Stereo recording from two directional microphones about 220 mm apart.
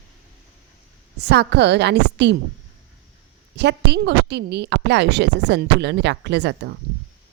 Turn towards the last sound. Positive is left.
turn(degrees=-50)  # may be behind; listen again after turning